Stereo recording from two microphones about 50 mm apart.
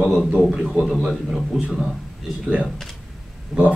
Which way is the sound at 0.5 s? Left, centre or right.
Centre.